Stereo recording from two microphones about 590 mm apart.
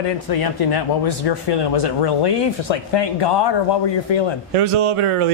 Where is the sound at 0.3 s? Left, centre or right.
Left.